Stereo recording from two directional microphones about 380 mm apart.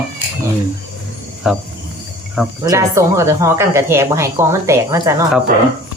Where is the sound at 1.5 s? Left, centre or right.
Centre.